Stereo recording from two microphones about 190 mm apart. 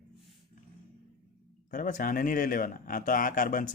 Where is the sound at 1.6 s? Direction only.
45° left (ahead or behind).